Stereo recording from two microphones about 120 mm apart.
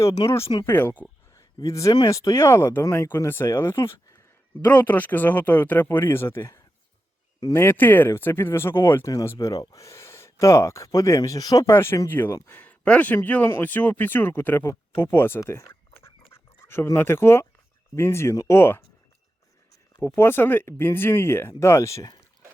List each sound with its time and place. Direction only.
0.0 s speech: 35° left (ahead or behind)
0.7 s speech: 15° left (ahead or behind)
1.3 s speech: 25° left (ahead or behind)
16.3 s a sound: 20° left (ahead or behind)
17.9 s speech: 20° left (ahead or behind)